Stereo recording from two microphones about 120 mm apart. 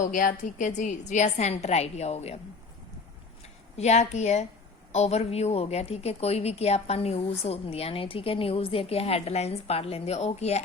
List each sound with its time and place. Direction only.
0.0 s a woman's voice: 90° left; by 2.4 s 60° left (ahead or behind)
3.8 s a woman's voice: 65° left (ahead or behind)